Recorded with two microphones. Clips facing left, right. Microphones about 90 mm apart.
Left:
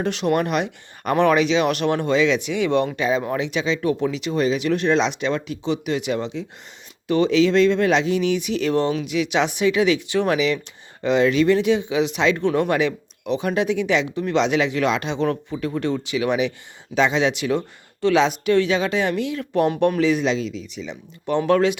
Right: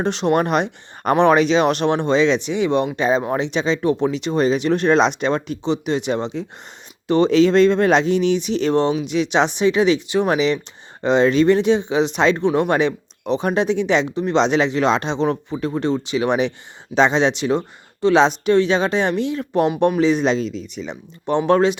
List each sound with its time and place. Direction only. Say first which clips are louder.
0.0 s speech: right 3 dB; 30° right (ahead or behind)
3.0 s speech: right 3 dB; 30° right (ahead or behind)
12.4 s speech: right 2 dB; 20° right (ahead or behind)
12.7 s speech: right 3 dB; 35° right (ahead or behind); by 20.0 s 15° right (ahead or behind)
20.0 s speech: right 2 dB; 25° right (ahead or behind)
20.2 s speech: right 3 dB; 40° right (ahead or behind)
21.2 s speech: right 2 dB; 25° right (ahead or behind)